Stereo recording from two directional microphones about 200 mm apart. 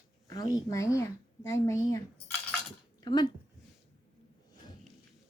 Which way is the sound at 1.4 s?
15° left (ahead or behind).